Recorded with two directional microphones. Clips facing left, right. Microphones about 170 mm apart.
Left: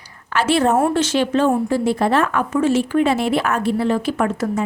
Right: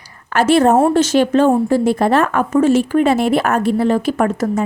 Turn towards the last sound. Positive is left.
turn(degrees=-45)  # may be behind; listen again after turning